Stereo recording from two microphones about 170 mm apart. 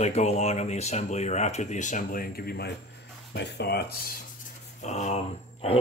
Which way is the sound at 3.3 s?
75° left (ahead or behind).